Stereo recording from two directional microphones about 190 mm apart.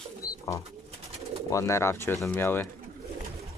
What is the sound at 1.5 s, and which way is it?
Speech, 15° left (ahead or behind).